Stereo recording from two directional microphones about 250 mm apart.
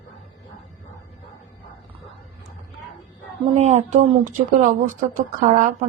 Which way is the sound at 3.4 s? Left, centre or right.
Right.